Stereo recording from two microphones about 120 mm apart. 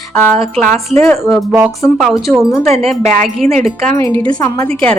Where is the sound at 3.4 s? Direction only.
65° right (ahead or behind).